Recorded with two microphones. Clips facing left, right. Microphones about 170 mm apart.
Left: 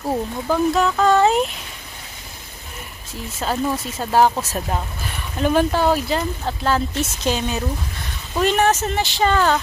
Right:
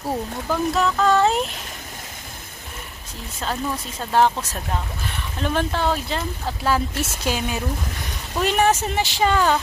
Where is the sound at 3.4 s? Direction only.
5° left (ahead or behind).